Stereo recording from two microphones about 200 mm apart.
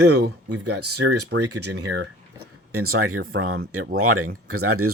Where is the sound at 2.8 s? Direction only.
90° right.